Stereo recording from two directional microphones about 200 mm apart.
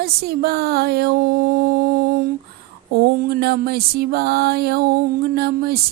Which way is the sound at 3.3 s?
50° right (ahead or behind).